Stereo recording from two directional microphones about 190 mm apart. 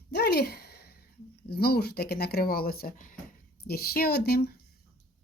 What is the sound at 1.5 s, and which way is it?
Speech, 55° left (ahead or behind).